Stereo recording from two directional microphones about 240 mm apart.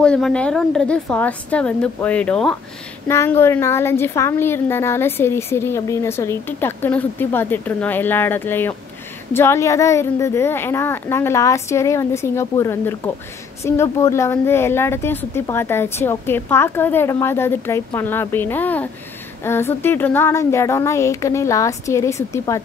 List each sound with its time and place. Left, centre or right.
0.0 s a woman's voice: centre